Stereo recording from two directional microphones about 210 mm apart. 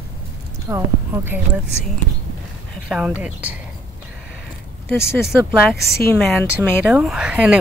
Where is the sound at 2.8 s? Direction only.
5° right (ahead or behind).